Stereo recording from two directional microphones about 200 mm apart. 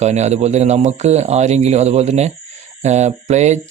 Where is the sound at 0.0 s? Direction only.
35° right (ahead or behind).